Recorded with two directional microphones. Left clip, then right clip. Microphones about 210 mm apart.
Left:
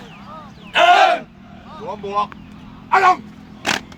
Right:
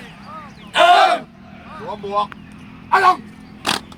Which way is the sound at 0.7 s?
Centre (ahead or behind).